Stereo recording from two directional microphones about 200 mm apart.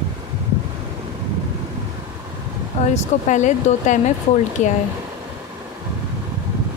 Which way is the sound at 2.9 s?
35° left (ahead or behind).